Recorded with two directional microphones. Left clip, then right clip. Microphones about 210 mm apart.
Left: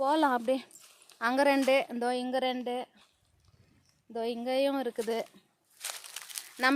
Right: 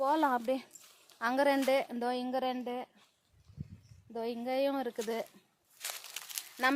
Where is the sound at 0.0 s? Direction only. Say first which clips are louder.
Left 3 dB; 40° left (ahead or behind).